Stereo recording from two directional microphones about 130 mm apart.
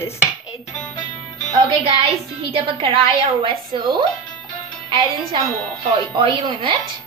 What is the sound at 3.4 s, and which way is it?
Speech, 40° right (ahead or behind).